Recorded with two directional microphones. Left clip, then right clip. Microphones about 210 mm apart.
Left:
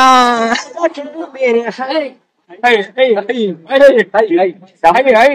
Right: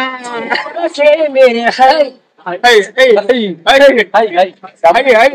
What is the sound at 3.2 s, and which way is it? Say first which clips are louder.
Speech: right 5 dB; 40° right (ahead or behind).